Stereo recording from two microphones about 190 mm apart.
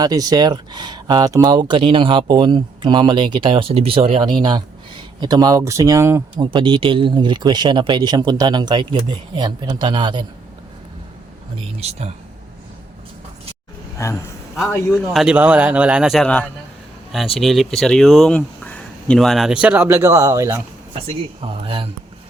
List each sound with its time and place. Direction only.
0.0 s speech: 20° right (ahead or behind)
11.8 s speech: 35° right (ahead or behind)
14.0 s a man's voice: 15° left (ahead or behind)
14.7 s speech: centre (ahead or behind); by 20.6 s 15° right (ahead or behind)
21.1 s speech: 30° right (ahead or behind)